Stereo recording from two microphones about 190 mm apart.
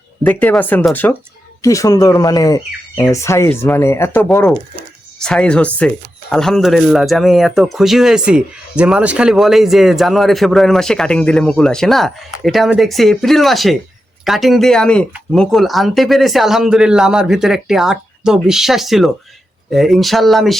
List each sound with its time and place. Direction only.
0.2 s speech: 10° left (ahead or behind)